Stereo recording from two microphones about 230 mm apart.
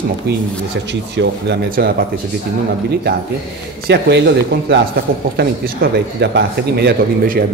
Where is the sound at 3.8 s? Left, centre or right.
Right.